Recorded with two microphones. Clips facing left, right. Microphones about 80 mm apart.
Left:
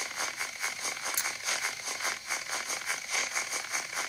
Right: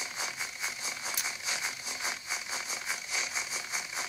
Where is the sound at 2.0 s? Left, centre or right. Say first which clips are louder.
Left 1 dB; centre.